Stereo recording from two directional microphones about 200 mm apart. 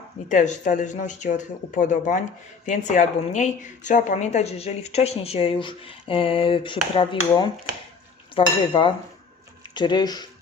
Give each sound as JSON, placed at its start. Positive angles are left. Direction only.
{"t": 0.3, "sound": "a woman's voice", "side_deg": 40}